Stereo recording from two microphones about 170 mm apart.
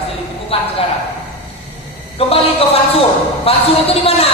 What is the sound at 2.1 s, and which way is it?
A woman's voice, 35° left (ahead or behind).